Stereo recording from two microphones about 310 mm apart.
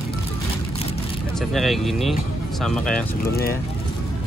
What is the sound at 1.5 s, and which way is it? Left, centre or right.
Speech, centre.